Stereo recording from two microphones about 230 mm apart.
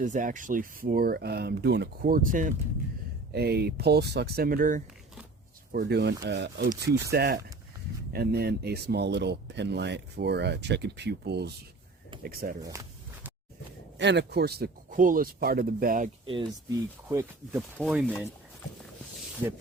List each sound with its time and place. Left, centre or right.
0.0 s speech: right
14.0 s speech: right
16.2 s speech: right
17.7 s speech: centre